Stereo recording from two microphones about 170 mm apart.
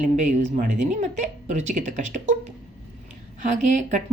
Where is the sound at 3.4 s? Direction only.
45° right (ahead or behind).